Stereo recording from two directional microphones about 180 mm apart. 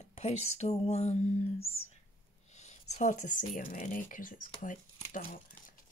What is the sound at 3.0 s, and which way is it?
Speech, 45° left (ahead or behind).